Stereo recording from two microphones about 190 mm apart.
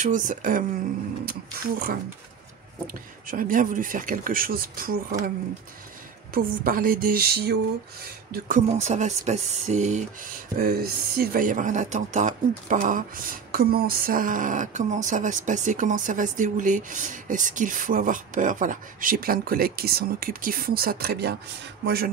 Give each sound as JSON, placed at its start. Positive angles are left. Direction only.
{"t": 0.0, "sound": "speech", "side_deg": -45}
{"t": 2.9, "sound": "speech", "side_deg": -50}
{"t": 6.3, "sound": "speech", "side_deg": -50}
{"t": 8.3, "sound": "speech", "side_deg": -45}